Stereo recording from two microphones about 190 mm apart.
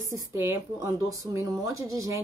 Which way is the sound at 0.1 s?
15° right (ahead or behind).